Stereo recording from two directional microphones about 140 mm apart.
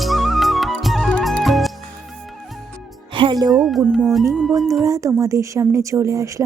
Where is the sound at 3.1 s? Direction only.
35° right (ahead or behind).